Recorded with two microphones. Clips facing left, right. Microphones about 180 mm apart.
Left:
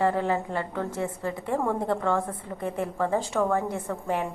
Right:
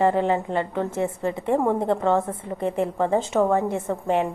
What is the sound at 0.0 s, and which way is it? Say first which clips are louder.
A woman's voice: right 4 dB; 20° right (ahead or behind).